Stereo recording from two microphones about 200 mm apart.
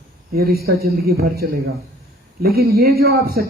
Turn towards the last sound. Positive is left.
turn(degrees=-50)  # may be behind; listen again after turning